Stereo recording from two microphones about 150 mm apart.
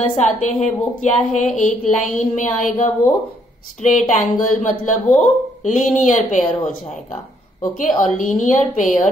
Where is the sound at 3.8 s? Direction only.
55° left (ahead or behind).